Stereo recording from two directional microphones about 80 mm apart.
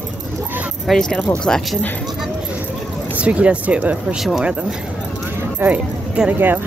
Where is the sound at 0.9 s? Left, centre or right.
Centre.